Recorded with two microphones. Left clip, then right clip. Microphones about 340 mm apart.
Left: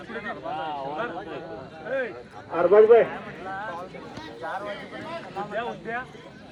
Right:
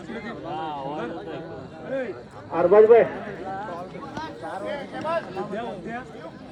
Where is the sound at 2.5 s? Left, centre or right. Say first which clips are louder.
Right 1 dB; centre.